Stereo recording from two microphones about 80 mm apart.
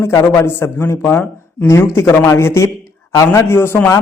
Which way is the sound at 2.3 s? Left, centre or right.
Left.